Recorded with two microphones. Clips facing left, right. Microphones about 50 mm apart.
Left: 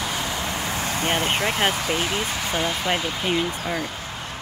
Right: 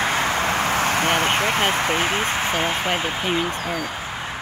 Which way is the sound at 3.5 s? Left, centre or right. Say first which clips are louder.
Right 1 dB; right.